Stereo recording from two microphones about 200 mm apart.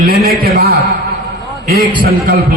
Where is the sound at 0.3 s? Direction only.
50° right (ahead or behind).